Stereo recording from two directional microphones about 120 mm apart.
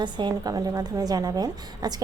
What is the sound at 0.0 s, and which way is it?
A woman's voice, 40° right (ahead or behind).